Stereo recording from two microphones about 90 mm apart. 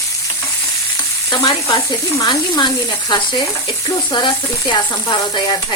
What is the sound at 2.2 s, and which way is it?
Stir, 50° left (ahead or behind).